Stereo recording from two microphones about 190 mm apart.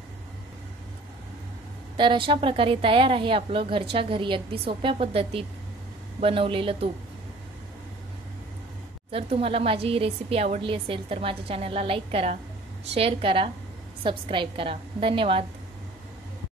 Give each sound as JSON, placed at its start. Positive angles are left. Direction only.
{"t": 2.0, "sound": "speech", "side_deg": -25}
{"t": 9.1, "sound": "speech", "side_deg": -30}